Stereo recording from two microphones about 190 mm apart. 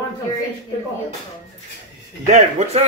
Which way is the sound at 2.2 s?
35° right (ahead or behind).